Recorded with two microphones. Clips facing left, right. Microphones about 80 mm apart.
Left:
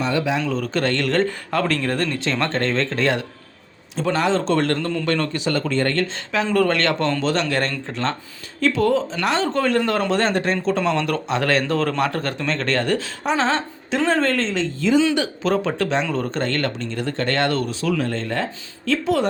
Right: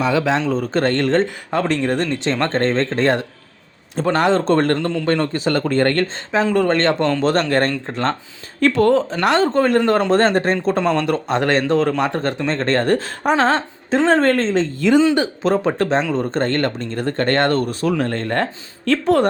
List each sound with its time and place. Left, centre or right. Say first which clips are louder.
0.1 s a man's voice: right 4 dB; right
0.4 s speech: right 4 dB; right
3.9 s speech: right 4 dB; right
6.5 s a man's voice: right 1 dB; right
7.3 s speech: right 4 dB; right
8.6 s speech: right 4 dB; right
9.5 s speech: right 4 dB; right
16.1 s a man's voice: right 4 dB; right
16.4 s speech: right 4 dB; right